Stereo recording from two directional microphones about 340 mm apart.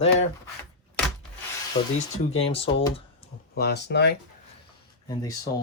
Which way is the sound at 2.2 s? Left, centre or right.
Centre.